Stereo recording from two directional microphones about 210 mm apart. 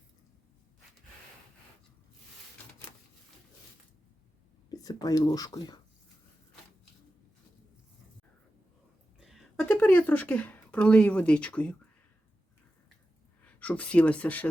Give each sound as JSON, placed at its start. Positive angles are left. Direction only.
{"t": 4.7, "sound": "speech", "side_deg": 15}
{"t": 9.2, "sound": "a sound", "side_deg": 0}
{"t": 13.4, "sound": "speech", "side_deg": 5}